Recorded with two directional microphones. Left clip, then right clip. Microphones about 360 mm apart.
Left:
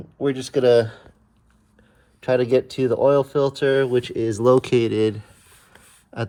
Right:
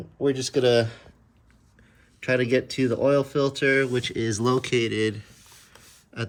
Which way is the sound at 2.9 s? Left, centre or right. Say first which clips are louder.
Left 5 dB; centre.